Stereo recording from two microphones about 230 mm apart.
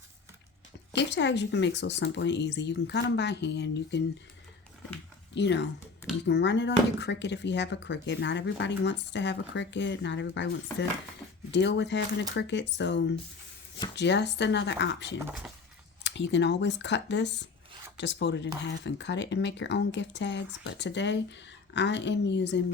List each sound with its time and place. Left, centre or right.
0.9 s speech: left
5.3 s speech: left
15.2 s speech: centre
16.0 s speech: left